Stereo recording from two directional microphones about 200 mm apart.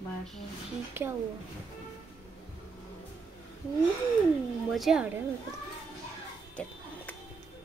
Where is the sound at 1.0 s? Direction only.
10° right (ahead or behind).